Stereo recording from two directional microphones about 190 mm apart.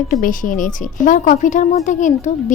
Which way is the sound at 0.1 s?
45° left (ahead or behind).